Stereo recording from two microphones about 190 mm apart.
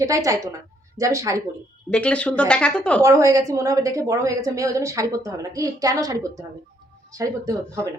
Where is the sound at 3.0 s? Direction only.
15° right (ahead or behind).